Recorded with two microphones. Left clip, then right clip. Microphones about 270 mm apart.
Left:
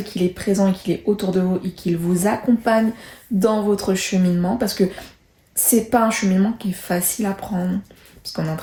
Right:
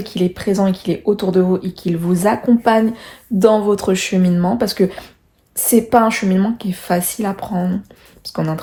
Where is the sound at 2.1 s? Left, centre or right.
Centre.